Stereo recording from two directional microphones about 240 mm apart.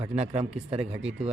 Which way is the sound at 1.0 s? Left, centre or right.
Centre.